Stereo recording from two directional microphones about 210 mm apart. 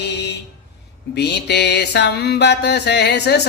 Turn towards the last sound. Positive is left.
turn(degrees=55)  # may be behind; listen again after turning